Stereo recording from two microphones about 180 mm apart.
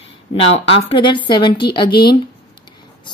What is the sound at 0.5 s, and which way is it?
Speech, 30° left (ahead or behind).